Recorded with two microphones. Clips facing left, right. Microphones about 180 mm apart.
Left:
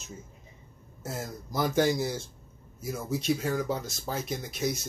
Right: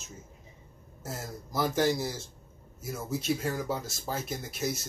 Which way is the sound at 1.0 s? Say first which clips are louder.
Left 3 dB; centre (ahead or behind).